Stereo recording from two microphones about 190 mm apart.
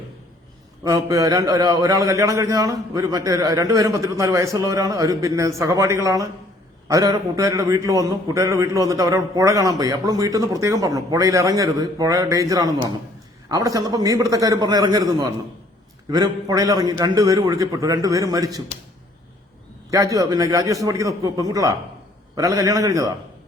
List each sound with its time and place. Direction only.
0.9 s a man's voice: 20° right (ahead or behind)
19.9 s a man's voice: 15° right (ahead or behind)